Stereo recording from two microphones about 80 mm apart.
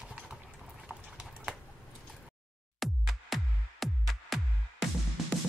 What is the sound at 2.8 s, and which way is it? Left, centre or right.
Music, centre.